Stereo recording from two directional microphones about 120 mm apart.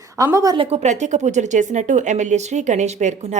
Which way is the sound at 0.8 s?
80° right.